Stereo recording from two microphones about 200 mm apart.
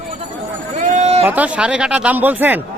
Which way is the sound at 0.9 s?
35° right (ahead or behind).